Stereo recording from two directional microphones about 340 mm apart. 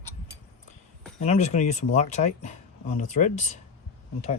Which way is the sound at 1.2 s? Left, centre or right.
Centre.